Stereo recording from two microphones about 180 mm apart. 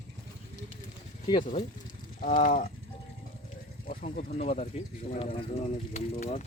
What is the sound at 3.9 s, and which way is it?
Speech, 50° left (ahead or behind).